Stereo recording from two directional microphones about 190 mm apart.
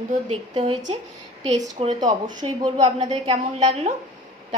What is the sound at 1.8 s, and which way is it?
Speech, 25° right (ahead or behind).